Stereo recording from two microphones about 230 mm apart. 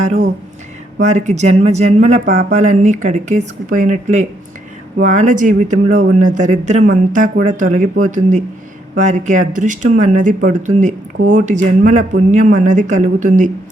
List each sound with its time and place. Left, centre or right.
0.0 s speech: right